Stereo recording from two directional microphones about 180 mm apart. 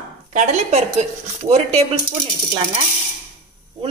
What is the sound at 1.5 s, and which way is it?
Speech, 35° right (ahead or behind).